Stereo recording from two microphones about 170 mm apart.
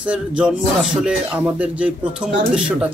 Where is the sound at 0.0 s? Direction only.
5° right (ahead or behind).